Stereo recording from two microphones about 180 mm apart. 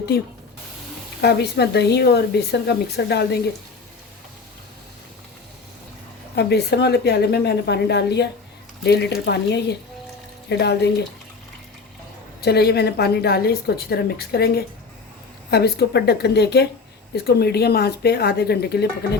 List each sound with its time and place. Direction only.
0.1 s a woman's voice: 60° left (ahead or behind)
6.3 s a woman's voice: 65° left (ahead or behind)
12.4 s a woman's voice: 65° left (ahead or behind)